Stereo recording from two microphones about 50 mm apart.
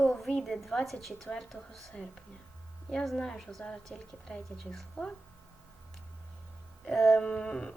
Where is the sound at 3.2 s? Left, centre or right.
Centre.